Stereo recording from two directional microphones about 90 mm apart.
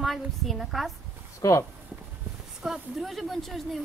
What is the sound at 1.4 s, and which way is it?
Speech, 35° left (ahead or behind).